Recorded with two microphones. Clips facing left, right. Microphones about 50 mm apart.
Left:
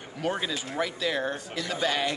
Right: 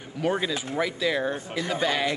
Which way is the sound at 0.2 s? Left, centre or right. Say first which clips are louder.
Right 4 dB; centre.